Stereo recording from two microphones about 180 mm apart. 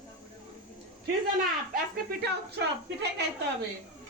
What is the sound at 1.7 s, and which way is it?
Speech, 60° right (ahead or behind).